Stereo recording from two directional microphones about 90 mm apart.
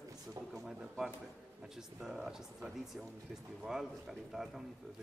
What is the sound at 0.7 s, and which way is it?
Speech, 5° right (ahead or behind).